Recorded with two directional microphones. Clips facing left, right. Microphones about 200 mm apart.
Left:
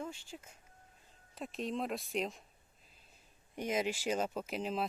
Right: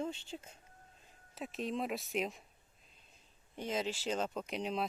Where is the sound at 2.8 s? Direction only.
5° left (ahead or behind).